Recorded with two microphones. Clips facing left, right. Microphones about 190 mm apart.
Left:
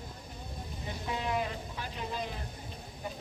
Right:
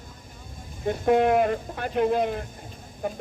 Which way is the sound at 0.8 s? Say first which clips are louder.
Right 16 dB; 50° right (ahead or behind).